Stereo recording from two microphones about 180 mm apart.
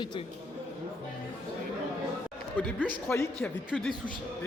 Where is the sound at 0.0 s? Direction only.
25° left (ahead or behind).